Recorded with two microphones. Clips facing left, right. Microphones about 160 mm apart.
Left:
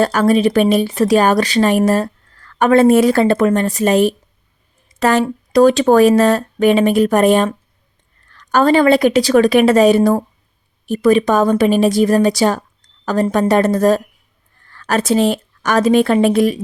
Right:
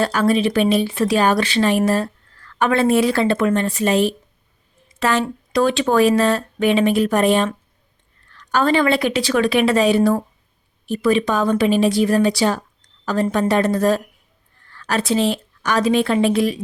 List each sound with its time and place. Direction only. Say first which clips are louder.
0.0 s a woman's voice: left 4 dB; 45° left (ahead or behind)